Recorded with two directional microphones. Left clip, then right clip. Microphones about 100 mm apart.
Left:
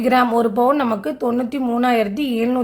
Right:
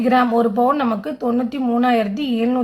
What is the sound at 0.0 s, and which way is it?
A woman's voice, 25° left (ahead or behind).